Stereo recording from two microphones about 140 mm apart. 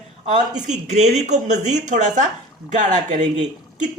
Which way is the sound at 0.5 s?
60° right (ahead or behind).